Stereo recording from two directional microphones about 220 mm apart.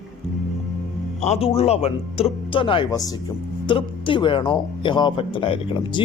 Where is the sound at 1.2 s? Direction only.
25° left (ahead or behind).